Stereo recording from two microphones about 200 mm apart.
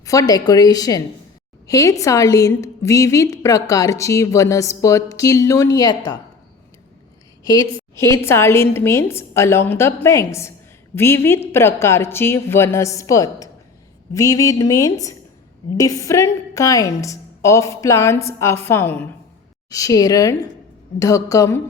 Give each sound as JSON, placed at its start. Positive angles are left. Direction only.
{"t": 0.0, "sound": "a woman's voice", "side_deg": 15}
{"t": 7.4, "sound": "a woman's voice", "side_deg": 20}